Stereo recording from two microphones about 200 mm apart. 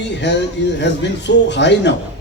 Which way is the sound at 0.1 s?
60° left (ahead or behind).